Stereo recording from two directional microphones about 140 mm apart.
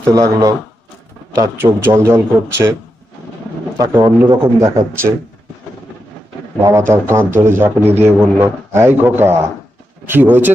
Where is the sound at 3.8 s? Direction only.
25° right (ahead or behind).